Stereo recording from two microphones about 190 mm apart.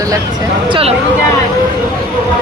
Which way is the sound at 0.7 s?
30° right (ahead or behind).